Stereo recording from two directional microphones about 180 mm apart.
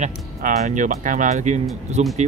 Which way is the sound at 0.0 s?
40° right (ahead or behind).